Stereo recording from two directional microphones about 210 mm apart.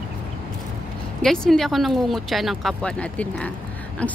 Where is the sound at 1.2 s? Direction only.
Centre (ahead or behind).